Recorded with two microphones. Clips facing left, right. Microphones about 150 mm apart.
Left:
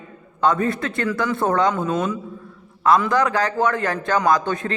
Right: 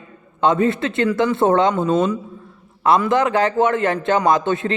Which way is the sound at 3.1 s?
25° right (ahead or behind).